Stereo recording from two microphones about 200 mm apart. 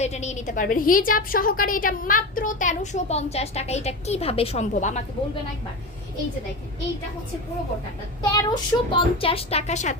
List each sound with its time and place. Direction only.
0.0 s a woman's voice: 35° left (ahead or behind)
8.4 s speech: 20° left (ahead or behind)